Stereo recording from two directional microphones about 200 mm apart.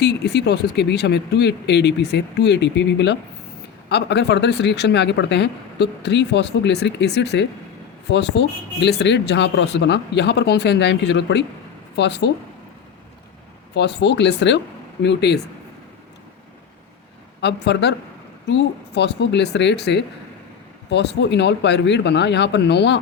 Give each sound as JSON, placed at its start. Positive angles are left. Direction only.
{"t": 0.0, "sound": "speech", "side_deg": 55}
{"t": 13.7, "sound": "speech", "side_deg": 60}
{"t": 17.4, "sound": "speech", "side_deg": 60}